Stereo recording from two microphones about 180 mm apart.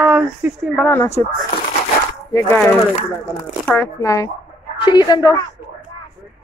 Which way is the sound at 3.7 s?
15° left (ahead or behind).